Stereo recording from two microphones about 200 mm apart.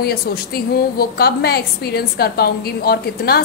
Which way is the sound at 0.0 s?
50° left (ahead or behind).